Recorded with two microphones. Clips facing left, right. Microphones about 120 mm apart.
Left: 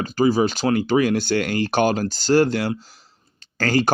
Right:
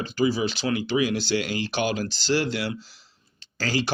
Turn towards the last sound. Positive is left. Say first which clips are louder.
# left 7 dB
turn(degrees=50)  # may be behind; listen again after turning